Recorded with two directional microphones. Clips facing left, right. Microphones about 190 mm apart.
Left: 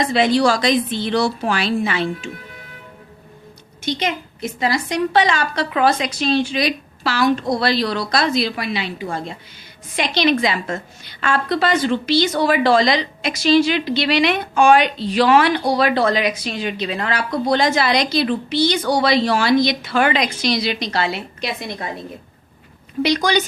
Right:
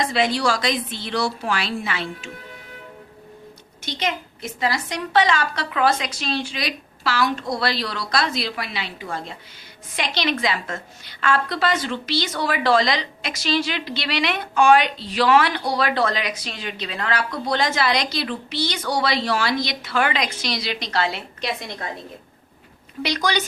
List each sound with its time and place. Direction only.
0.0 s a woman's voice: 20° left (ahead or behind)
3.8 s a woman's voice: 15° left (ahead or behind)
23.0 s a woman's voice: 15° left (ahead or behind)